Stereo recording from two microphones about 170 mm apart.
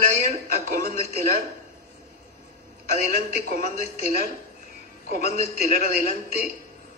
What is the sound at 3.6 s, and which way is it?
A man's voice, 40° left (ahead or behind).